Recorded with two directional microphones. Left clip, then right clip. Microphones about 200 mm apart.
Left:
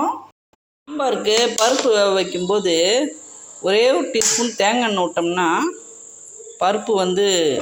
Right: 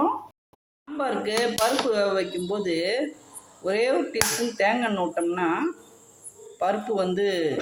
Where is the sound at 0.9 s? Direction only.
20° left (ahead or behind).